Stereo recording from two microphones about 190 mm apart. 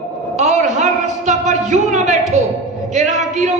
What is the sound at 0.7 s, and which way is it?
A woman's voice, 40° right (ahead or behind).